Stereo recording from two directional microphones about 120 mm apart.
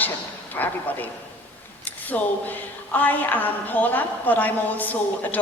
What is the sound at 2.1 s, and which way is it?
A woman's voice, 10° left (ahead or behind).